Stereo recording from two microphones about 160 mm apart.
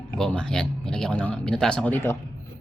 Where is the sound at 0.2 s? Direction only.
5° left (ahead or behind).